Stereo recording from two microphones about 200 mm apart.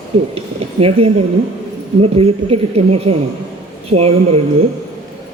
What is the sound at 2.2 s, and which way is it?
Speech, 30° right (ahead or behind).